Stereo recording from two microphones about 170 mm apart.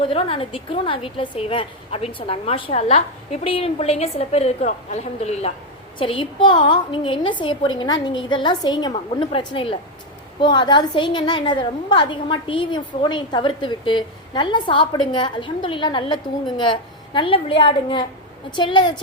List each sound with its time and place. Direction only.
0.0 s a woman's voice: 35° left (ahead or behind)